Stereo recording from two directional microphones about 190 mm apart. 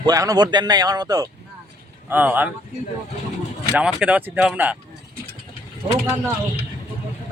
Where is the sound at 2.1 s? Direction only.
10° right (ahead or behind).